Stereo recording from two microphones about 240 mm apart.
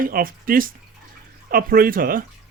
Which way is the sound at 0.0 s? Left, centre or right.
Right.